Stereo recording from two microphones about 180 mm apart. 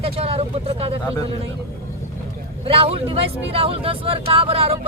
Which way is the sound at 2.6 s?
30° right (ahead or behind).